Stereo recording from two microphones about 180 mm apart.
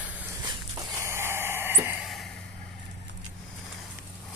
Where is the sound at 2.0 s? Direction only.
Centre (ahead or behind).